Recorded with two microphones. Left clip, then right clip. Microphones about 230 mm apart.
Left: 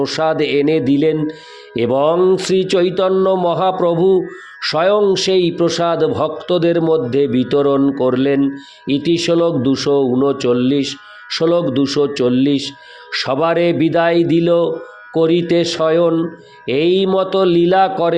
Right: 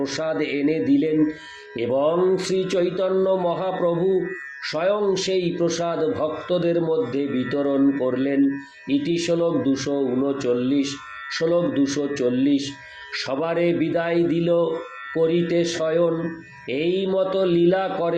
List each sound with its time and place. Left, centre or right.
0.0 s speech: left